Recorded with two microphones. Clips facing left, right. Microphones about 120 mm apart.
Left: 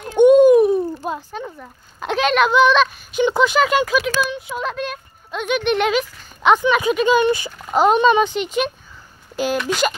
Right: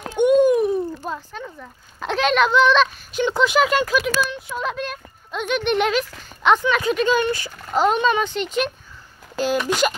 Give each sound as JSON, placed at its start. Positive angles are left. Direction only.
{"t": 0.2, "sound": "a child's voice", "side_deg": 20}
{"t": 9.6, "sound": "speech", "side_deg": 0}